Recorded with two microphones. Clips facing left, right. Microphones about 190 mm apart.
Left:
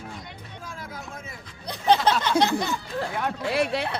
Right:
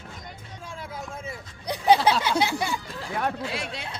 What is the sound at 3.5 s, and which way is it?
Speech, 60° left (ahead or behind).